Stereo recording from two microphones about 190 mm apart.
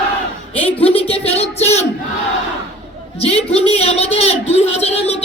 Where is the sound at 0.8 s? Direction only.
30° left (ahead or behind).